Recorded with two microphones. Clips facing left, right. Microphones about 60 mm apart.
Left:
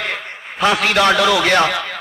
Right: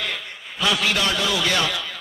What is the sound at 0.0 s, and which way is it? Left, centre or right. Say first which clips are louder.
A man's voice: left 5 dB; left.